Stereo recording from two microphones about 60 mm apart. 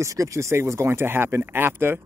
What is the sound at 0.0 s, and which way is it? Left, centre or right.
Speech, right.